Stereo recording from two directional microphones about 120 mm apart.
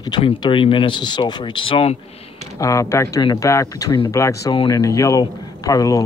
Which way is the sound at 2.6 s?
25° left (ahead or behind).